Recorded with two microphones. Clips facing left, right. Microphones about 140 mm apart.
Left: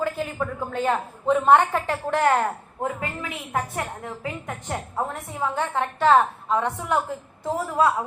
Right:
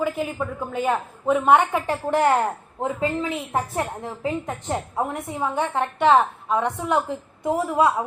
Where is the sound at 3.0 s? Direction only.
25° right (ahead or behind).